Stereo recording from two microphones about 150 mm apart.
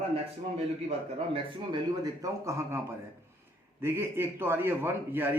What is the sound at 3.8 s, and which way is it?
A man's voice, 15° right (ahead or behind).